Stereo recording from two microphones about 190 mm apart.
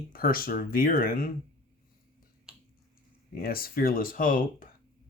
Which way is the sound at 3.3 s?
50° left (ahead or behind).